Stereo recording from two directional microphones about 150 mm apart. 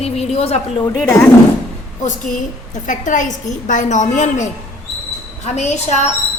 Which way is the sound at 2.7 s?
55° left (ahead or behind).